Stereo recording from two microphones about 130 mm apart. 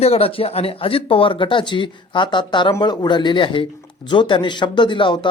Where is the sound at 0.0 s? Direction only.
50° left (ahead or behind).